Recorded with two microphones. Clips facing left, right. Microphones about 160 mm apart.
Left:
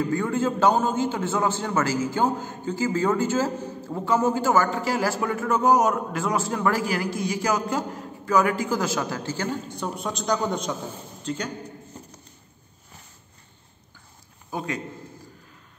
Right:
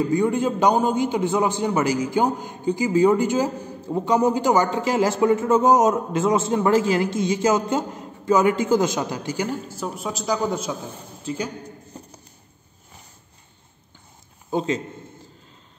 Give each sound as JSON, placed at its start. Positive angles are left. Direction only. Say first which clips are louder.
{"t": 0.0, "sound": "a man's voice", "louder": "right 4 dB", "side_deg": -15}
{"t": 14.5, "sound": "a man's voice", "louder": "right 7 dB", "side_deg": -25}